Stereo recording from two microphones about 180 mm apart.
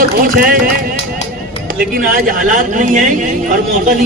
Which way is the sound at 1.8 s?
50° right (ahead or behind).